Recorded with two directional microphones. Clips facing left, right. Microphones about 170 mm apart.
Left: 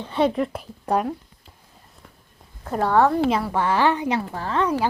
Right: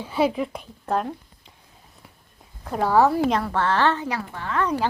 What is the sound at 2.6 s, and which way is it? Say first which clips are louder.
Speech: even; centre (ahead or behind).